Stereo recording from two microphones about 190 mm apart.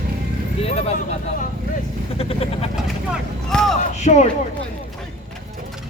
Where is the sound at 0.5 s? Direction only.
30° left (ahead or behind).